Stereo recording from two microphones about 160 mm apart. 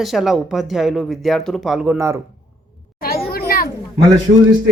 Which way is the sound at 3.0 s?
70° left (ahead or behind).